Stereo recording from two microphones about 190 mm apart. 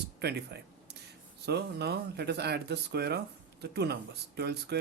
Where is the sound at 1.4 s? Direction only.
60° right (ahead or behind).